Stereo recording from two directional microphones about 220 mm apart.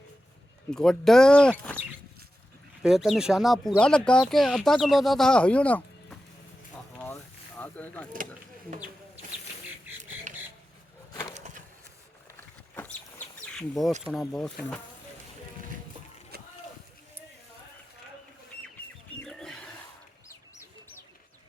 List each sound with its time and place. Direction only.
0.7 s speech: 5° left (ahead or behind)
2.8 s speech: centre (ahead or behind)
7.0 s vehicle: 10° left (ahead or behind)
10.3 s a sound: 35° right (ahead or behind)
12.4 s bird: 10° left (ahead or behind)
14.0 s speech: centre (ahead or behind)
16.3 s a sound: 45° right (ahead or behind)
19.2 s wild animals: 5° left (ahead or behind)